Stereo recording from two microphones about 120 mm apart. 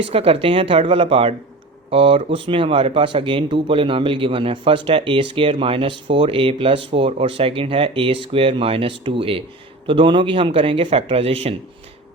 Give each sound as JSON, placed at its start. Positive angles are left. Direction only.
{"t": 0.1, "sound": "speech", "side_deg": -50}